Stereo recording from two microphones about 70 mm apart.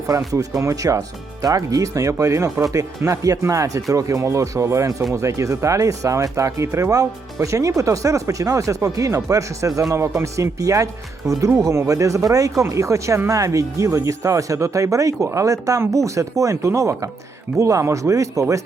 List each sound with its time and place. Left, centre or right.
0.3 s speech: right